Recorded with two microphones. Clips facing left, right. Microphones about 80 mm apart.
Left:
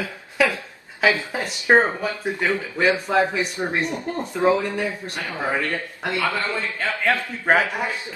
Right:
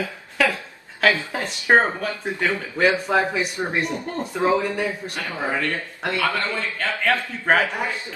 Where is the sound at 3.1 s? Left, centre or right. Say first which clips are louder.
Left 1 dB; centre.